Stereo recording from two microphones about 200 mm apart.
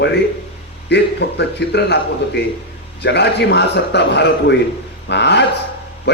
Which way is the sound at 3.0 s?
60° left (ahead or behind).